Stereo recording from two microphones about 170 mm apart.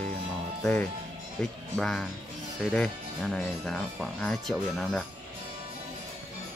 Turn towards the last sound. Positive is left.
turn(degrees=0)  # may be behind; listen again after turning